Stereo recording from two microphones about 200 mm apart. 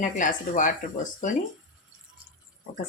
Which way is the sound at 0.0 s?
40° left (ahead or behind).